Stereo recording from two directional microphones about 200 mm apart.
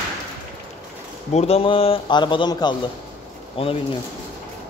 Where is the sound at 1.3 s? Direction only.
30° left (ahead or behind).